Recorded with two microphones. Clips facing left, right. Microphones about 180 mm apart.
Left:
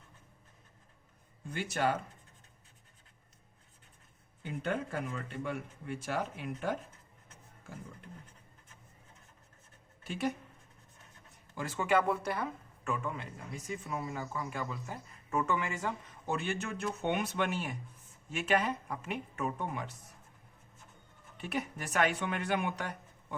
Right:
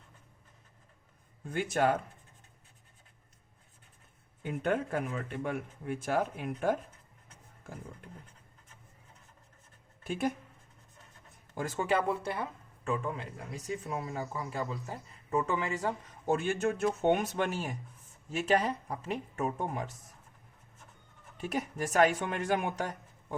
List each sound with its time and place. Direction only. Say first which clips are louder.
1.5 s speech: right 4 dB; 45° right (ahead or behind)
4.4 s speech: right 4 dB; 55° right (ahead or behind)
10.1 s speech: right 2 dB; 50° right (ahead or behind)
11.5 s speech: even; 45° right (ahead or behind)
21.3 s speech: right 3 dB; 45° right (ahead or behind)